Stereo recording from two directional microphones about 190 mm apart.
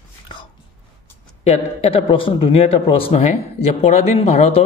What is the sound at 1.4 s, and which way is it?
A man's voice, 35° left (ahead or behind).